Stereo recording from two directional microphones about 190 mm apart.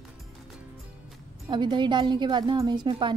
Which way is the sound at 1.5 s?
25° right (ahead or behind).